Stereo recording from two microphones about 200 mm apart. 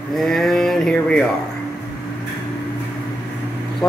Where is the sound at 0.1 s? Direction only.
Centre (ahead or behind).